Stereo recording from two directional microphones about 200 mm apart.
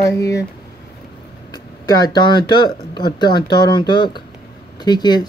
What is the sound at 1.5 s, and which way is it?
Speech, 20° left (ahead or behind).